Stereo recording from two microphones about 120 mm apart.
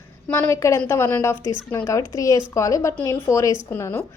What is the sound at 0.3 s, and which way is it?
A woman's voice, 25° left (ahead or behind).